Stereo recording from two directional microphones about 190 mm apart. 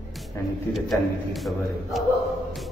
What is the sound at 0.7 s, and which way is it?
Speech, centre (ahead or behind).